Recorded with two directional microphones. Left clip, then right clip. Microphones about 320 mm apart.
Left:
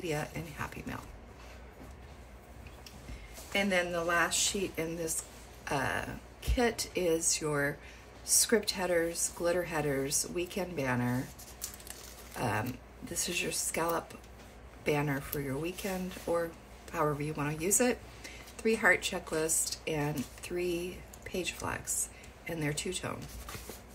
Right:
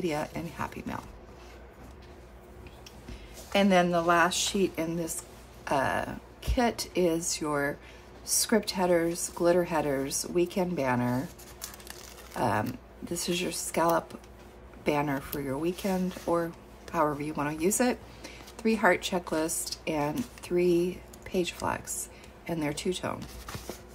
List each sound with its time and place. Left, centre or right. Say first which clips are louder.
0.0 s a woman's voice: right 5 dB; centre
3.5 s a woman's voice: right 6 dB; centre
12.4 s a woman's voice: right 6 dB; centre